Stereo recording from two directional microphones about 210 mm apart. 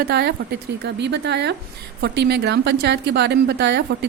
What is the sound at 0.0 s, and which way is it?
A woman's voice, 50° right (ahead or behind).